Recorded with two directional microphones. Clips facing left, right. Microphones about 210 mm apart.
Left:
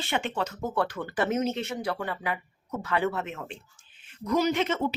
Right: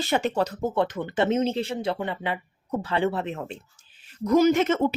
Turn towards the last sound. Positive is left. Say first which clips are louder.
# right 6 dB
turn(degrees=-50)  # may be behind; listen again after turning